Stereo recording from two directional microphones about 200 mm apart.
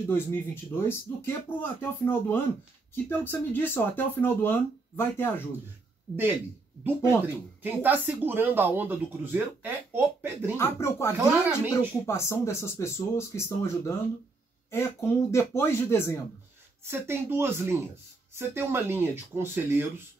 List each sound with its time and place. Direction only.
0.0 s speech: 10° left (ahead or behind)
7.6 s speech: 10° right (ahead or behind)
10.6 s speech: 15° left (ahead or behind)
11.1 s speech: 10° right (ahead or behind)
12.1 s speech: 15° left (ahead or behind)
16.8 s speech: 10° right (ahead or behind)